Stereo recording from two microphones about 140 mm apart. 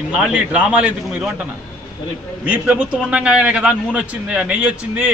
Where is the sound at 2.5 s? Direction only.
10° right (ahead or behind).